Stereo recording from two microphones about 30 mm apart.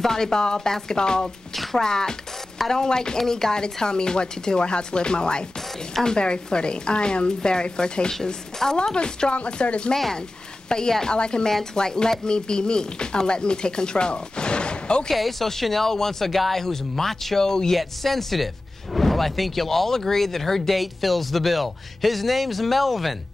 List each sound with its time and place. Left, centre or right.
0.0 s speech: centre
1.5 s a sound: centre
1.8 s speech: left
8.1 s speech: centre
8.9 s speech: left
10.7 s speech: centre
11.1 s speech: left
15.0 s speech: centre
17.4 s speech: centre
17.7 s speech: centre